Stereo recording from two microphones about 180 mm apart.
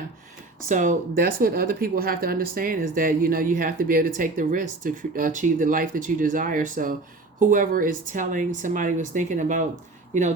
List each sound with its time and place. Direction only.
0.7 s speech: 45° right (ahead or behind)